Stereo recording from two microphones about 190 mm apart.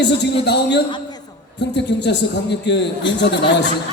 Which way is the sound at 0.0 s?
65° left (ahead or behind).